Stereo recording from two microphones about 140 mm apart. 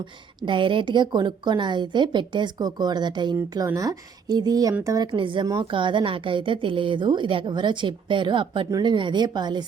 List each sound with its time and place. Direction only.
0.0 s a woman's voice: 35° right (ahead or behind)
5.1 s speech: 35° right (ahead or behind)